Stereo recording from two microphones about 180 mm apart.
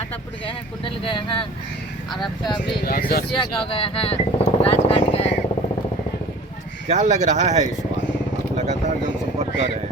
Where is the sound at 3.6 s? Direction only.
30° left (ahead or behind).